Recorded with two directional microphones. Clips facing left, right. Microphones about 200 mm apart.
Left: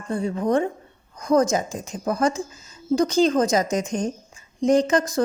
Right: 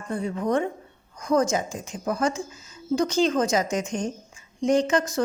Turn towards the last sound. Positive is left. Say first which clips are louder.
# left 3 dB
turn(degrees=35)  # may be behind; listen again after turning